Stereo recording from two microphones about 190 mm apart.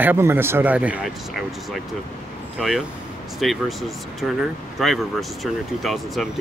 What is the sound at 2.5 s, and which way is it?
Speech, 5° right (ahead or behind).